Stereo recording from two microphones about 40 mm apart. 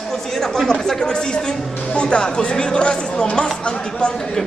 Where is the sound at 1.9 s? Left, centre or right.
Left.